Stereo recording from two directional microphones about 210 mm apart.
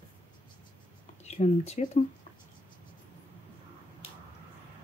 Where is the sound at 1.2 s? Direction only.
30° left (ahead or behind).